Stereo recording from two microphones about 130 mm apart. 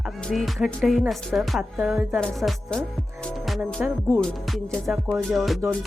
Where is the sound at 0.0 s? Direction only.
Centre (ahead or behind).